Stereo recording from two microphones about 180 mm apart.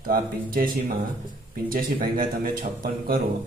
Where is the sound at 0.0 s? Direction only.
55° right (ahead or behind).